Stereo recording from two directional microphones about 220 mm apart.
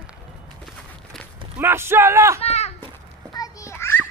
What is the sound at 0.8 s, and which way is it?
Walk, 5° left (ahead or behind).